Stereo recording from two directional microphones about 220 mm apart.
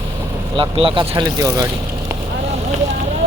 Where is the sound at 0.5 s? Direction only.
25° right (ahead or behind).